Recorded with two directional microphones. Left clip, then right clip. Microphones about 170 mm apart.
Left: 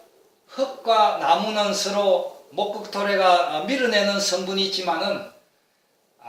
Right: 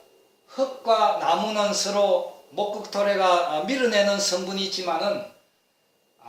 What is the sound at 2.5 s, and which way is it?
A man's voice, 15° right (ahead or behind).